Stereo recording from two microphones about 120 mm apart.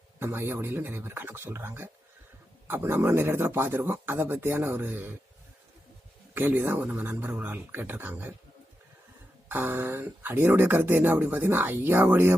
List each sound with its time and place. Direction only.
0.2 s speech: 20° right (ahead or behind)
6.3 s speech: 15° right (ahead or behind)
9.5 s speech: 15° right (ahead or behind)